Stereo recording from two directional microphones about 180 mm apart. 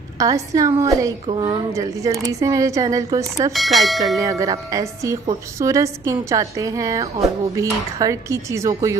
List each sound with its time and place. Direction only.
0.2 s speech: 20° right (ahead or behind)
3.5 s speech: centre (ahead or behind)
4.2 s a woman's voice: 20° right (ahead or behind)